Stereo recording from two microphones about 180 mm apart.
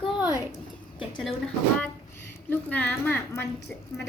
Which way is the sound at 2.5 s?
10° left (ahead or behind).